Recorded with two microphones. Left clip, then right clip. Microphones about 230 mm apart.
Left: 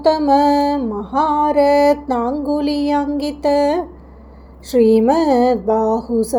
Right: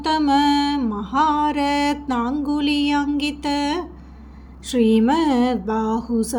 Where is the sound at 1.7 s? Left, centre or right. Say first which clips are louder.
Left 8 dB; right.